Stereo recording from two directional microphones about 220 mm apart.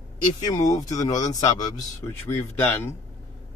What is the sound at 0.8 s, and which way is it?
A man's voice, 15° left (ahead or behind).